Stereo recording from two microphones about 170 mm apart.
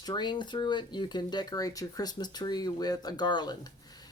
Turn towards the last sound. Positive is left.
turn(degrees=25)  # may be behind; listen again after turning